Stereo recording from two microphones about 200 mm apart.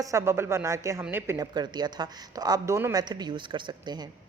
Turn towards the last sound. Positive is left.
turn(degrees=-20)  # may be behind; listen again after turning